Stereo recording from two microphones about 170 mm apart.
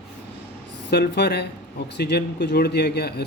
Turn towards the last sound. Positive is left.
turn(degrees=75)  # may be behind; listen again after turning